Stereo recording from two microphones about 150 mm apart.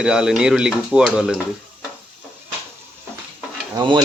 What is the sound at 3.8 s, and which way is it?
Insect, 30° right (ahead or behind).